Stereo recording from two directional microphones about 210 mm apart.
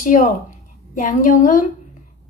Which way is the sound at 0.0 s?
40° left (ahead or behind).